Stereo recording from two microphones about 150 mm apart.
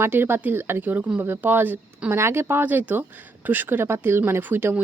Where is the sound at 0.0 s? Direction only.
15° right (ahead or behind).